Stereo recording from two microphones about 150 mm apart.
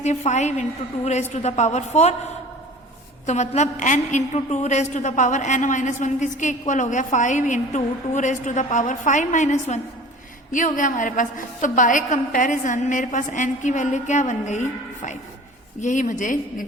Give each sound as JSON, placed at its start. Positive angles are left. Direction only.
{"t": 0.0, "sound": "a woman's voice", "side_deg": 50}
{"t": 3.2, "sound": "a woman's voice", "side_deg": 50}